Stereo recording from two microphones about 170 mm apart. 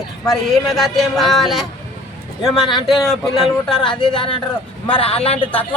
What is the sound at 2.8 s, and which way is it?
Speech, centre (ahead or behind).